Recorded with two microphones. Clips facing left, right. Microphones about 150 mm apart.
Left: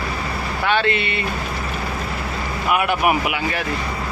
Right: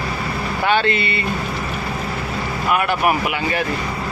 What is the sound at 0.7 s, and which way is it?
Speech, centre (ahead or behind).